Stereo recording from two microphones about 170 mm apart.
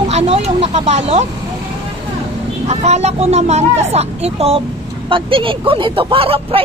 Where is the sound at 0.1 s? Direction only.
40° right (ahead or behind).